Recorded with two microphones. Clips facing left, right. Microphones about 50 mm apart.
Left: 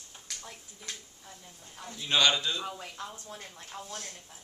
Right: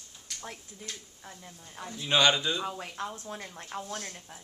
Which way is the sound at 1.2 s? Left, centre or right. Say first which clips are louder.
Right 3 dB; right.